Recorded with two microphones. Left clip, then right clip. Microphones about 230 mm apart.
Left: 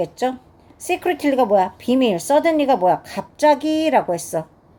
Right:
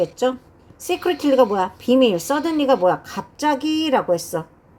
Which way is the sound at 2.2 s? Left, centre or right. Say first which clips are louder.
Left 6 dB; right.